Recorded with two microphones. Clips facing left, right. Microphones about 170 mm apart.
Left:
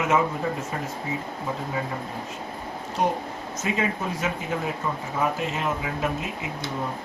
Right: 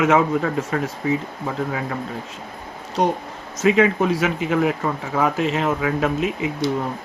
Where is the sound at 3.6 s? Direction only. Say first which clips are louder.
Right 11 dB; 90° right.